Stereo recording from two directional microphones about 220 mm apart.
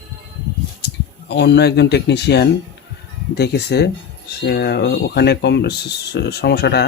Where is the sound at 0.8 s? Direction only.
50° left (ahead or behind).